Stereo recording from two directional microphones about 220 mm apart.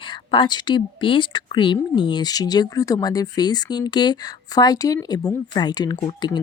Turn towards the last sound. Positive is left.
turn(degrees=20)  # may be behind; listen again after turning